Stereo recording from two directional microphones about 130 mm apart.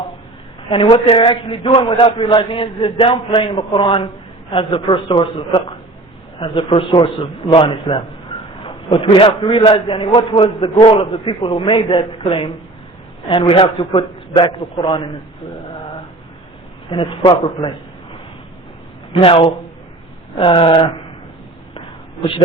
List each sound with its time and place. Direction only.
0.7 s a man's voice: 40° left (ahead or behind)
16.9 s a man's voice: 40° left (ahead or behind)
19.1 s a man's voice: 45° left (ahead or behind)
21.8 s a sound: 40° left (ahead or behind)